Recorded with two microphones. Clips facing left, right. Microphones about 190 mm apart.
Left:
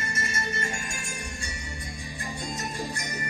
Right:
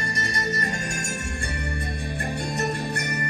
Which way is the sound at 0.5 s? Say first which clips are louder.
Right 5 dB; 40° right (ahead or behind).